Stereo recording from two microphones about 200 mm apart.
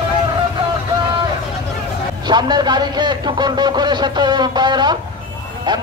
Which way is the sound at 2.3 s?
20° right (ahead or behind).